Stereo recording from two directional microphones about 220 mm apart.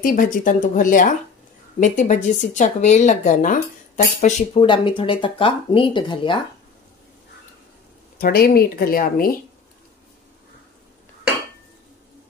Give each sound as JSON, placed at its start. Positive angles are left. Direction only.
{"t": 0.0, "sound": "speech", "side_deg": 40}
{"t": 8.2, "sound": "speech", "side_deg": 45}